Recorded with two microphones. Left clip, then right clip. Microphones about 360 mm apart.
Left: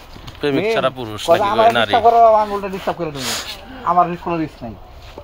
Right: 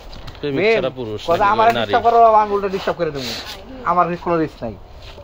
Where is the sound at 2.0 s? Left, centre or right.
Centre.